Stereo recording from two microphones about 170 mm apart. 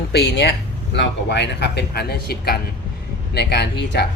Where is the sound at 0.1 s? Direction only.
80° left.